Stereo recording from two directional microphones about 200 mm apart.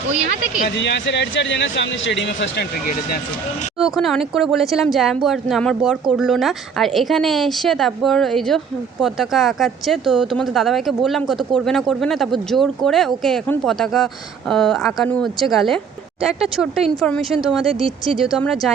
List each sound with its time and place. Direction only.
0.8 s speech: 60° left (ahead or behind)
3.8 s speech: centre (ahead or behind)
17.7 s speech: 25° right (ahead or behind)
18.2 s speech: centre (ahead or behind)